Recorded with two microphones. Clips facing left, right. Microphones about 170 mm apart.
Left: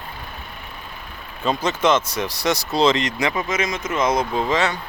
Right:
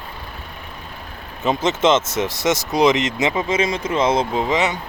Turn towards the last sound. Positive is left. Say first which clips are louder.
# right 1 dB
turn(degrees=-20)  # may be behind; listen again after turning